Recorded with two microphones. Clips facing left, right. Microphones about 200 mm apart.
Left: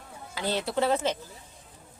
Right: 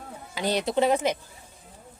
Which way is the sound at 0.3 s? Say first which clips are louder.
Right 4 dB; 15° right (ahead or behind).